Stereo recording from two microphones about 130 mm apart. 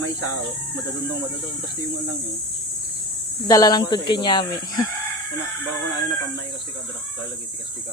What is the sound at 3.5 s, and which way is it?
Speech, 30° left (ahead or behind).